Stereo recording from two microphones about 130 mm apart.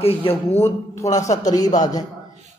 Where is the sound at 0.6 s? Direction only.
25° left (ahead or behind).